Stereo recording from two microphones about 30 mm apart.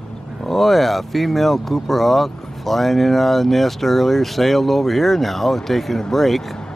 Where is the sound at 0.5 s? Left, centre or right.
Centre.